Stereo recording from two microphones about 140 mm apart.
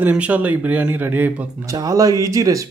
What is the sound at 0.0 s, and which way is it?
Speech, 10° right (ahead or behind).